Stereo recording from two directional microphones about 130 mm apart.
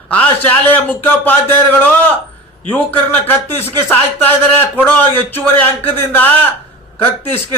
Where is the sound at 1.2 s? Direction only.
15° left (ahead or behind).